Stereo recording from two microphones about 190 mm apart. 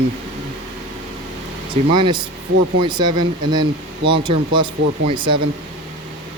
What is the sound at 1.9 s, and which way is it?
Speech, 25° right (ahead or behind).